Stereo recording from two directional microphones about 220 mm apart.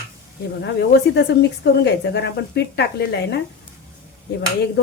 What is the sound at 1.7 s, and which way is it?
Speech, 50° left (ahead or behind).